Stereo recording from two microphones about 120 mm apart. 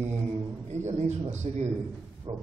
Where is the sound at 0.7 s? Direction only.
75° right (ahead or behind).